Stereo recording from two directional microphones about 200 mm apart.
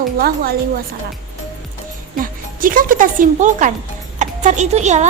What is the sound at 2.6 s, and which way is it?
Speech, 45° right (ahead or behind).